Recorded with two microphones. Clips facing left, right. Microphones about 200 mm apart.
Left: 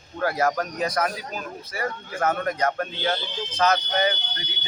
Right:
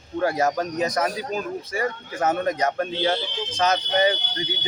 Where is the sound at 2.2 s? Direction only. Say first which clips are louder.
Right 2 dB; 20° right (ahead or behind).